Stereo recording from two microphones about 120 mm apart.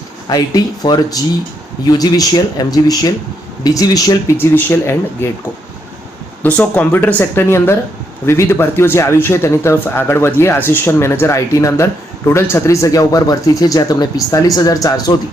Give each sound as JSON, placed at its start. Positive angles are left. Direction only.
{"t": 0.3, "sound": "speech", "side_deg": 35}
{"t": 4.4, "sound": "speech", "side_deg": 20}
{"t": 6.6, "sound": "speech", "side_deg": 15}